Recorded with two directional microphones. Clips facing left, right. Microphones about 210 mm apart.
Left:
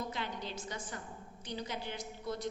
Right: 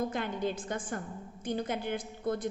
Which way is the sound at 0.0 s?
50° right (ahead or behind).